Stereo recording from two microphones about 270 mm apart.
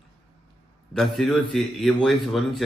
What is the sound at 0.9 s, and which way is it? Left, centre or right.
Speech, centre.